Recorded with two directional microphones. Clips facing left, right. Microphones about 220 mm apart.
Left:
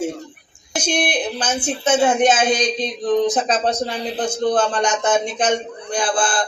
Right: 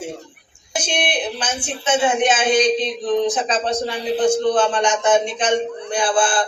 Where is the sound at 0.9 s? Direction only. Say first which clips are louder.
Left 1 dB; 40° left (ahead or behind).